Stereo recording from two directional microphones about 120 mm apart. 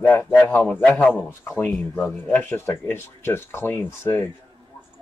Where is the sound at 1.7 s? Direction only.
5° left (ahead or behind).